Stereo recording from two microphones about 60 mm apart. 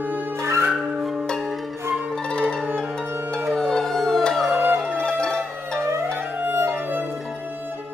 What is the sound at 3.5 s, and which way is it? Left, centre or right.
Howl, centre.